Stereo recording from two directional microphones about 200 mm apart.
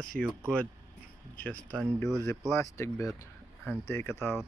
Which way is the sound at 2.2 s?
10° left (ahead or behind).